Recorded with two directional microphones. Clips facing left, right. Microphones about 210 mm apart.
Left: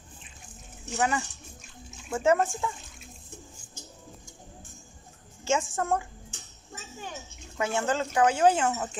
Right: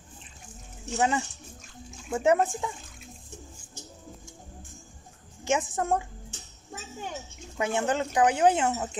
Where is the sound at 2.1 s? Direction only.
10° right (ahead or behind).